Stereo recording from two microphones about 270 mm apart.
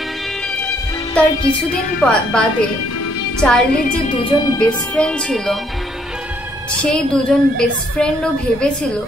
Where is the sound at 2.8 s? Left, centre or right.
Left.